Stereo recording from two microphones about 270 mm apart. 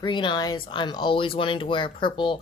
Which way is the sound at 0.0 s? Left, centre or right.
Centre.